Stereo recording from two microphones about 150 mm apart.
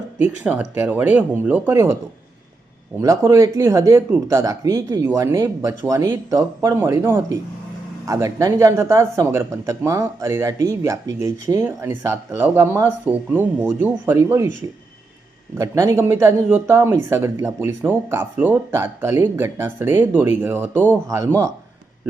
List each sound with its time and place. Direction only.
0.2 s speech: 10° right (ahead or behind)
3.0 s speech: 20° right (ahead or behind)
15.5 s speech: 20° right (ahead or behind)